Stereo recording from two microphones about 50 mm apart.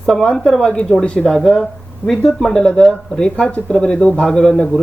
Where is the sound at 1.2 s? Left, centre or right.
Centre; by 4.2 s left.